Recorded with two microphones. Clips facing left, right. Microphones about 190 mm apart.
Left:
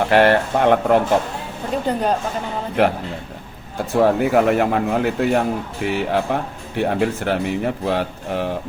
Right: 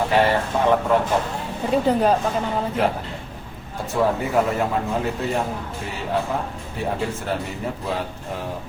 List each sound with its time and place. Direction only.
0.1 s speech: 70° left (ahead or behind)
1.9 s speech: 5° right (ahead or behind)
2.8 s speech: 70° left (ahead or behind)